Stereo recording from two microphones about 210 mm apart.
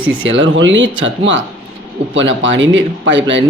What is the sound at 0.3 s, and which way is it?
Speech, 60° right (ahead or behind).